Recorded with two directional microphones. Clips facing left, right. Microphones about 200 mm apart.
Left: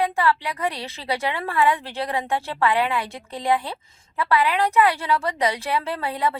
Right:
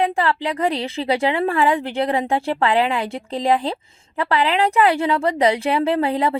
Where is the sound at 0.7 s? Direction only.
25° right (ahead or behind).